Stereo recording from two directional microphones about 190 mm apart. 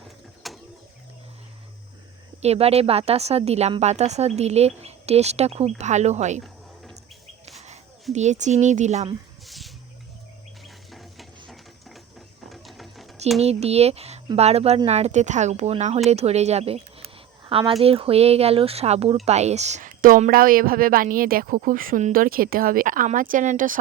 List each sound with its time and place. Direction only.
0.4 s mechanisms: centre (ahead or behind)
2.4 s speech: 35° right (ahead or behind)
8.1 s speech: 35° right (ahead or behind)
9.5 s a sound: centre (ahead or behind)
10.9 s a sound: centre (ahead or behind)
12.5 s ratchet: centre (ahead or behind)
13.4 s speech: 35° right (ahead or behind)